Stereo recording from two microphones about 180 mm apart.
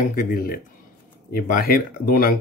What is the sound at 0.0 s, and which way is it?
Speech, 50° left (ahead or behind).